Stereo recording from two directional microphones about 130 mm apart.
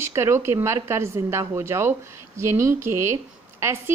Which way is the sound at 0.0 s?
20° right (ahead or behind).